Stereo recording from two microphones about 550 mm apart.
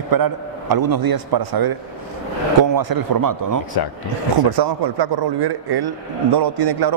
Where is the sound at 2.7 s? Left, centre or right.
Right.